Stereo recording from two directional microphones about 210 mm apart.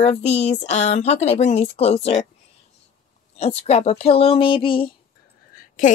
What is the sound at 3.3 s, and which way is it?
Speech, 30° left (ahead or behind).